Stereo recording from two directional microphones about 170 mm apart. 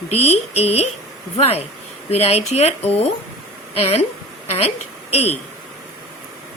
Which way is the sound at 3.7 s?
35° left (ahead or behind).